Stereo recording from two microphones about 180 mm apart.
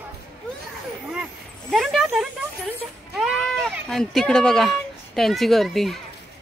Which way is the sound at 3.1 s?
5° right (ahead or behind).